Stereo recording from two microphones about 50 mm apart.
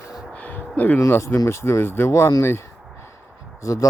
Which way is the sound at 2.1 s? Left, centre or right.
Left.